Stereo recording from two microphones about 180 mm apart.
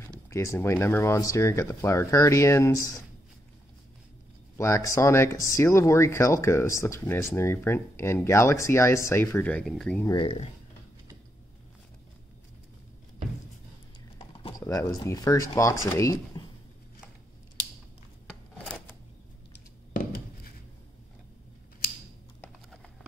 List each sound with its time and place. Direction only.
0.3 s speech: 15° left (ahead or behind)
4.6 s speech: 15° left (ahead or behind)
10.0 s speech: 30° left (ahead or behind)
14.1 s typing: 30° left (ahead or behind)
14.7 s speech: 20° left (ahead or behind)
18.2 s scissors: 5° left (ahead or behind)